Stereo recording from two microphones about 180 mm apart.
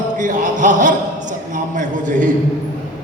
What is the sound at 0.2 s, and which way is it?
A man's voice, 45° right (ahead or behind).